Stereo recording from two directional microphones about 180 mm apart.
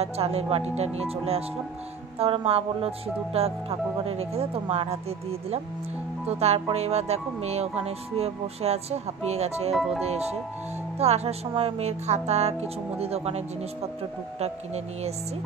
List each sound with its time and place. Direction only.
0.0 s speech: 35° right (ahead or behind)
6.2 s speech: 35° right (ahead or behind)
9.7 s speech: centre (ahead or behind)
10.0 s speech: 35° right (ahead or behind)